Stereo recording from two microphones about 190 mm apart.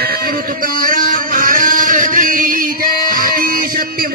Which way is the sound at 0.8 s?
50° right (ahead or behind).